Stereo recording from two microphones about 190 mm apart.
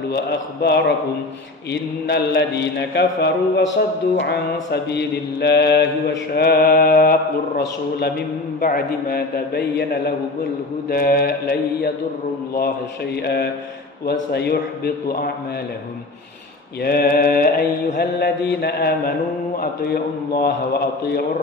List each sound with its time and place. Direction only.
0.1 s mantra: 60° left (ahead or behind)
16.8 s mantra: 55° left (ahead or behind)